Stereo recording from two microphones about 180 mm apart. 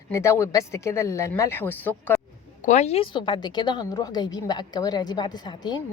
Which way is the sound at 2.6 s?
40° left (ahead or behind).